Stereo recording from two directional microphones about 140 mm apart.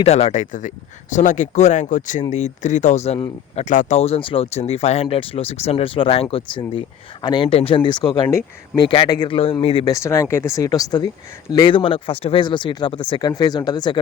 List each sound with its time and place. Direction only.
0.0 s speech: 50° left (ahead or behind)
9.9 s speech: 20° left (ahead or behind)